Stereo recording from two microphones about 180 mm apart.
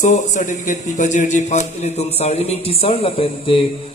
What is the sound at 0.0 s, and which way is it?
A man's voice, 45° left (ahead or behind).